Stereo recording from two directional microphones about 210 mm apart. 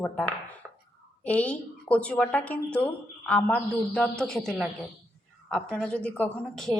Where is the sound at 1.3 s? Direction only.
5° left (ahead or behind).